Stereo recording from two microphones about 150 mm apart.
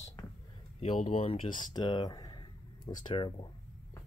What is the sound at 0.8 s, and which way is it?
Speech, 45° left (ahead or behind).